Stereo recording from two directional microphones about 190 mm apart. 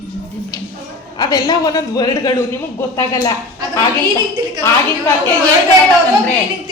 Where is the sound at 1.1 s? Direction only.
20° left (ahead or behind).